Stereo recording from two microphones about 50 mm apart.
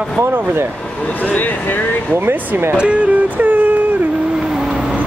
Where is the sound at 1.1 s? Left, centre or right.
Left.